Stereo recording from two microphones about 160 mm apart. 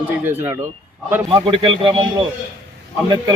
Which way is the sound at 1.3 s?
30° right (ahead or behind).